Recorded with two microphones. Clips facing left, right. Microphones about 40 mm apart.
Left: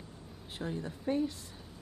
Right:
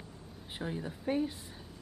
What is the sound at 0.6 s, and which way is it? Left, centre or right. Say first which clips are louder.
Speech: even; centre.